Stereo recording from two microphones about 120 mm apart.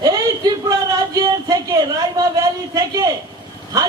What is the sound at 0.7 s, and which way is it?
A man's voice, 30° right (ahead or behind).